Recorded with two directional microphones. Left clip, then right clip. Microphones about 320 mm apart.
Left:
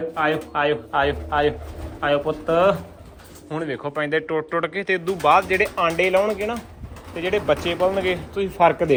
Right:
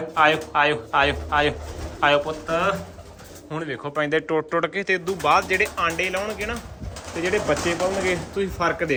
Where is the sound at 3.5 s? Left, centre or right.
Centre.